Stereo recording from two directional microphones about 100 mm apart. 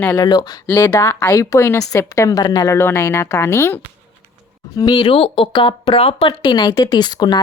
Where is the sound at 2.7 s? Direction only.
25° left (ahead or behind).